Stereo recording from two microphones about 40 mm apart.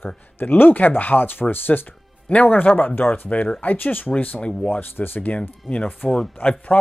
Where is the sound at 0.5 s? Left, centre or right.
Left.